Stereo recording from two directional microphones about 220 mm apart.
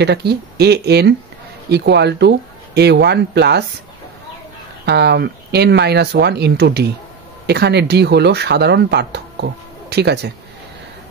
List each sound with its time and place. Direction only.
0.0 s speech: 50° right (ahead or behind)
4.8 s speech: 50° right (ahead or behind)